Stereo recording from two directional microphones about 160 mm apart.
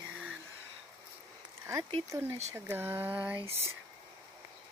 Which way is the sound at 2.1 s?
15° right (ahead or behind).